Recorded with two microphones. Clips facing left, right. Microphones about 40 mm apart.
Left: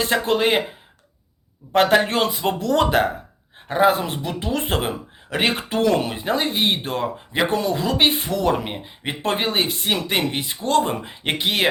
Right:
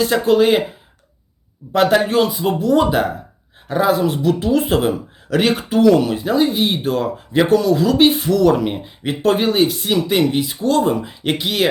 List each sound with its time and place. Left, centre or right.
0.0 s speech: left
1.7 s speech: left
3.7 s speech: left